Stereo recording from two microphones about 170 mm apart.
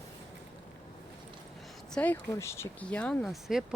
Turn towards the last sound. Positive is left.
turn(degrees=-5)  # may be behind; listen again after turning